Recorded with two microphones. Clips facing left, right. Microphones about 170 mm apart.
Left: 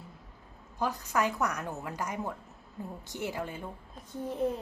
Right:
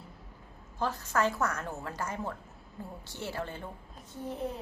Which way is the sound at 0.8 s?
15° left (ahead or behind).